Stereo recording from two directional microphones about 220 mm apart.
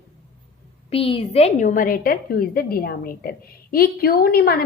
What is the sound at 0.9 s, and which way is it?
A woman's voice, 25° left (ahead or behind).